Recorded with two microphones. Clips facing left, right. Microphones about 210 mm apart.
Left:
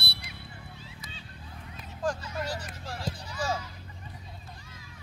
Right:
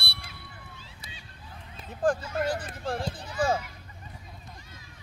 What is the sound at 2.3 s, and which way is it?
Speech, 55° right (ahead or behind).